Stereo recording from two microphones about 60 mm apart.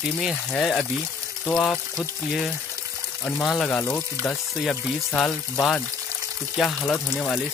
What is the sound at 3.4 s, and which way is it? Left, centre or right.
Speech, centre.